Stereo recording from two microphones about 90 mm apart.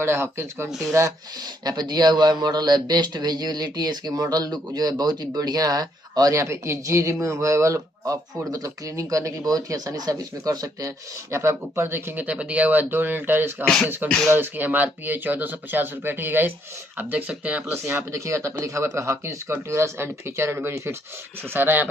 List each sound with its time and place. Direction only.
0.0 s speech: 30° right (ahead or behind)
0.7 s speech: 5° right (ahead or behind)
1.6 s a man's voice: 50° right (ahead or behind)
11.3 s speech: 30° right (ahead or behind)
14.0 s speech: 10° left (ahead or behind)
14.3 s speech: 20° right (ahead or behind)
17.8 s speech: 30° right (ahead or behind)